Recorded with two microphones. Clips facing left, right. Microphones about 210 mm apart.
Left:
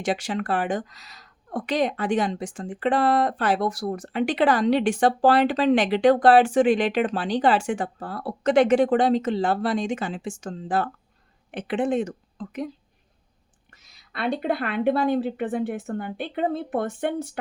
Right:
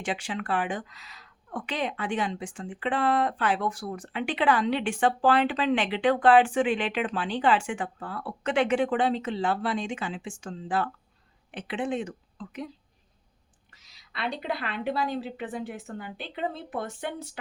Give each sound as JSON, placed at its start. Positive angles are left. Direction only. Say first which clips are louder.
{"t": 0.0, "sound": "a woman's voice", "louder": "left 6 dB", "side_deg": 40}